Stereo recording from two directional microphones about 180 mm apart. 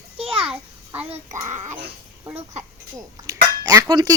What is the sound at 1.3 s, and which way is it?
Speech, 15° right (ahead or behind).